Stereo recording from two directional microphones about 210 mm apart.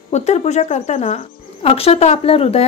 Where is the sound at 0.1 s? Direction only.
30° left (ahead or behind).